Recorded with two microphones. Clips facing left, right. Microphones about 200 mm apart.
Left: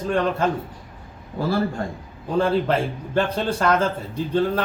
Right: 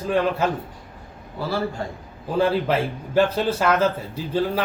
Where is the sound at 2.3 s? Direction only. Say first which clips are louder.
Even; 5° right (ahead or behind).